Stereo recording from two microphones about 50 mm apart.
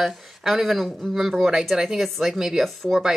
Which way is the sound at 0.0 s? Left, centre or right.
Centre.